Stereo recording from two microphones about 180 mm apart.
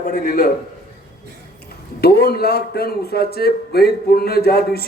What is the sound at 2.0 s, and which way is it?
A man's voice, 60° left (ahead or behind).